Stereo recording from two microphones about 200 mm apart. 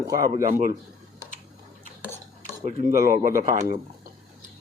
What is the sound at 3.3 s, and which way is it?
Speech, 15° right (ahead or behind).